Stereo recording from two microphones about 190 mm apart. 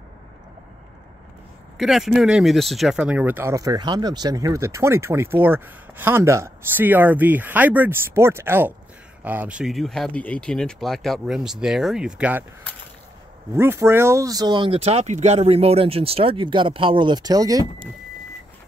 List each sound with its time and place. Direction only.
1.8 s speech: centre (ahead or behind)
13.5 s speech: 15° right (ahead or behind)